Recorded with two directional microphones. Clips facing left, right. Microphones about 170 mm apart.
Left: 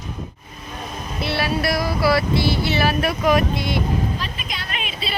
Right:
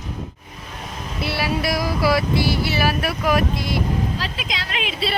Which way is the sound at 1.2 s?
10° right (ahead or behind).